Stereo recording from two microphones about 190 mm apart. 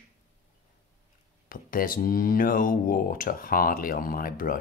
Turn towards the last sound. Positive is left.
turn(degrees=50)  # may be behind; listen again after turning